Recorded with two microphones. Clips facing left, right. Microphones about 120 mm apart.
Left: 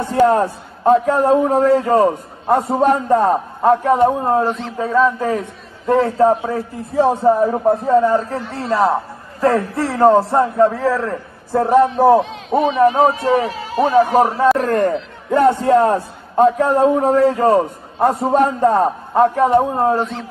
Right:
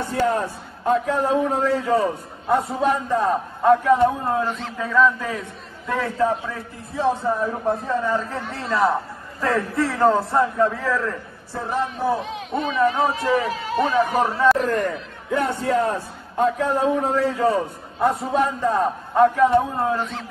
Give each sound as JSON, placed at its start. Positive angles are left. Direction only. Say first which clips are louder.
{"t": 0.1, "sound": "a man's voice", "louder": "left 9 dB", "side_deg": 45}
{"t": 11.5, "sound": "a man's voice", "louder": "left 12 dB", "side_deg": 55}
{"t": 12.7, "sound": "a man's voice", "louder": "left 5 dB", "side_deg": 25}